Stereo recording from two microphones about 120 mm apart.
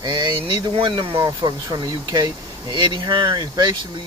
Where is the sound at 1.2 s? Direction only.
35° right (ahead or behind).